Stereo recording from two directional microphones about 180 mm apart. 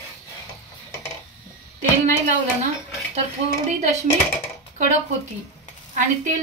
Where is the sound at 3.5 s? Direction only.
45° right (ahead or behind).